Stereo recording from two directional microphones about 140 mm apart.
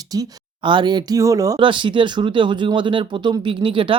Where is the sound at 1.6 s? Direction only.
35° right (ahead or behind).